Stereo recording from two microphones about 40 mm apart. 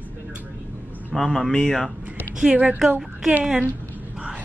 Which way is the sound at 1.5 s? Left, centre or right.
Centre.